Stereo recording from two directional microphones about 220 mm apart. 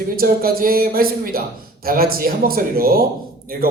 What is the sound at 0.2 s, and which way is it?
Speech, 40° right (ahead or behind).